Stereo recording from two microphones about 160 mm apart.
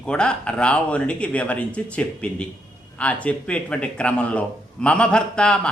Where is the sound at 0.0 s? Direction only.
5° left (ahead or behind).